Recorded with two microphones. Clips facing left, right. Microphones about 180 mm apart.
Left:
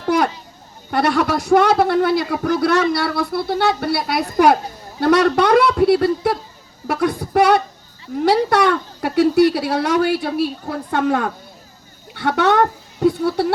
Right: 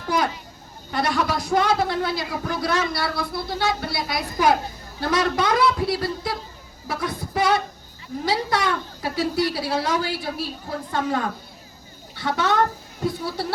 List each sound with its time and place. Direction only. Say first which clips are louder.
0.9 s speech: left 6 dB; 65° left (ahead or behind)